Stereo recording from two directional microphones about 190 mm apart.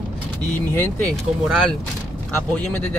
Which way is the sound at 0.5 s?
10° left (ahead or behind).